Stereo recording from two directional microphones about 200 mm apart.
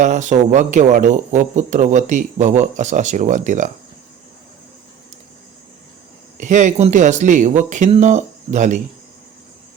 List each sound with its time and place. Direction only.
0.0 s speech: 35° right (ahead or behind)
6.4 s speech: 35° right (ahead or behind)